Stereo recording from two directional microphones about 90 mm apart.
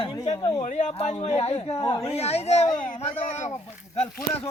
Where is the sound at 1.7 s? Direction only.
45° left (ahead or behind).